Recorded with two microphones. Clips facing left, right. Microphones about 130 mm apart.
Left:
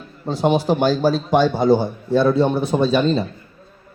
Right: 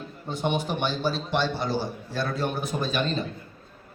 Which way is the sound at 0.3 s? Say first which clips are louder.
Left 9 dB; 35° left (ahead or behind).